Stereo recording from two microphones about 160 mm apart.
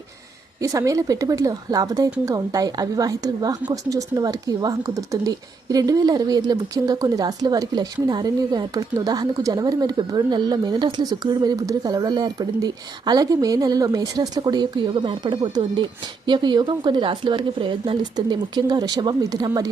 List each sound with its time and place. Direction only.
0.6 s speech: 20° right (ahead or behind)